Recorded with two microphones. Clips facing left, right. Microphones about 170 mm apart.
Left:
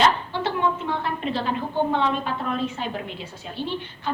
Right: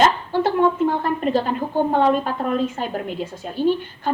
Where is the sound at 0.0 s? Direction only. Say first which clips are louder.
Right 4 dB; 45° right (ahead or behind).